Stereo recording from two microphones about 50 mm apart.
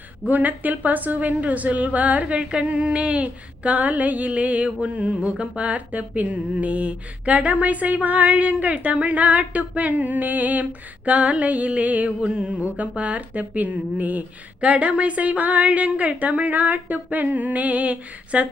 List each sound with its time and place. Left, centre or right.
0.3 s a woman's voice: right
12.2 s a woman's voice: centre